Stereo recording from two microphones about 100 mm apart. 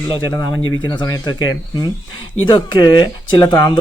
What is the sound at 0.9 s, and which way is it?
Speech, 45° left (ahead or behind).